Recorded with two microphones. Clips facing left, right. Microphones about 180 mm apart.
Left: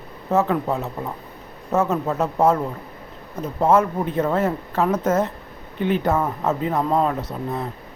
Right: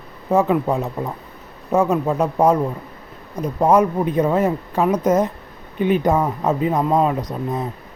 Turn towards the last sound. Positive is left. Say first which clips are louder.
# right 3 dB
turn(degrees=-15)  # may be behind; listen again after turning